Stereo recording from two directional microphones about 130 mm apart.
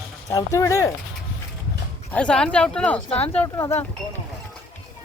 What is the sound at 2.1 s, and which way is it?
Speech, 10° left (ahead or behind).